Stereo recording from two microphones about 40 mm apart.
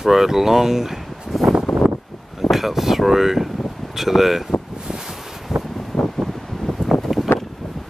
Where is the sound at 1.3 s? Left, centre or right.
Centre.